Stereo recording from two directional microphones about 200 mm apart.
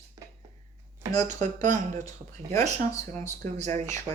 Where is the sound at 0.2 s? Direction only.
15° right (ahead or behind).